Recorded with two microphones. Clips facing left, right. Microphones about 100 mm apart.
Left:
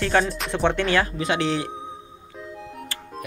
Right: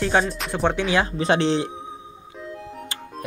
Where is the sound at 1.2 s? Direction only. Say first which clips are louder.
Right 3 dB; 30° right (ahead or behind).